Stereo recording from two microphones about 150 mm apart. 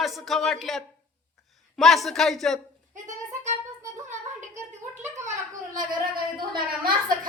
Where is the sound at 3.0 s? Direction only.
50° right (ahead or behind).